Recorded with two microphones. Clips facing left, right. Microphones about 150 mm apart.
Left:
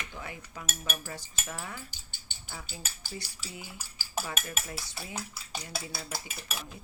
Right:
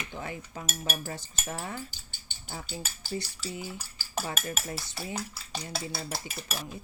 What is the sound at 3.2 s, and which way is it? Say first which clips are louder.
Speech: right 7 dB; 30° right (ahead or behind).